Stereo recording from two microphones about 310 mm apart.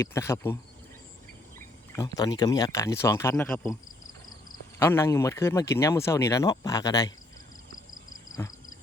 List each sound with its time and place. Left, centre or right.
0.0 s speech: centre
4.8 s speech: centre